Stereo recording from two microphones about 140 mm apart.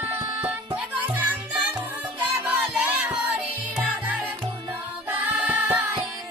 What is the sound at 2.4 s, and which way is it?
Music, 10° right (ahead or behind).